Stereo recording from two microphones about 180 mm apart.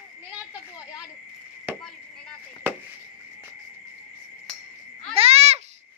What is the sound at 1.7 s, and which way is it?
Chop, 10° right (ahead or behind).